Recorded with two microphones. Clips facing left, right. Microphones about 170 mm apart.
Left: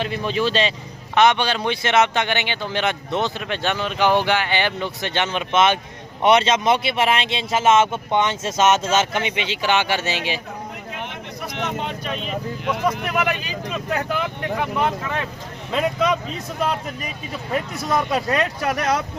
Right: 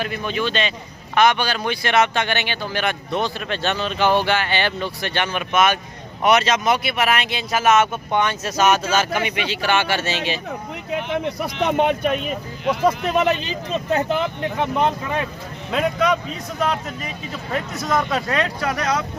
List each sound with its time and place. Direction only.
0.0 s speech: 30° left (ahead or behind); by 10.4 s 15° left (ahead or behind)
11.1 s a sound: 65° right (ahead or behind)
11.6 s speech: 65° right (ahead or behind)
12.8 s speech: 25° right (ahead or behind)
15.7 s a man's voice: centre (ahead or behind)
17.9 s speech: 15° left (ahead or behind)